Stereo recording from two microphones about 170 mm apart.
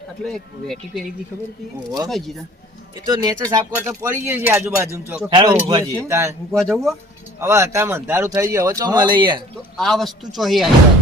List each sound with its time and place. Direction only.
0.3 s speech: centre (ahead or behind)
2.0 s speech: centre (ahead or behind)
3.1 s speech: 20° right (ahead or behind)
5.3 s speech: 30° right (ahead or behind)
6.5 s speech: 5° left (ahead or behind)
7.3 s speech: 15° right (ahead or behind)
9.7 s speech: centre (ahead or behind)